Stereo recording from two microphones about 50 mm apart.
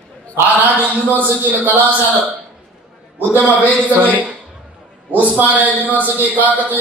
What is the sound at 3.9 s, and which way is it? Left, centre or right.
Mantra, right.